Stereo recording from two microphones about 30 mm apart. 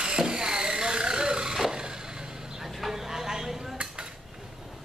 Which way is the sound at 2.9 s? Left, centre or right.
Centre.